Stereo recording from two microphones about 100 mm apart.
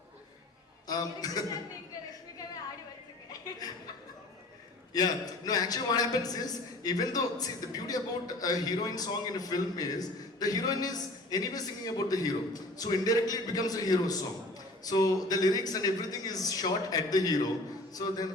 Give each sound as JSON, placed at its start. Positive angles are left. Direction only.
{"t": 0.9, "sound": "a man's voice", "side_deg": 40}
{"t": 4.9, "sound": "a man's voice", "side_deg": 40}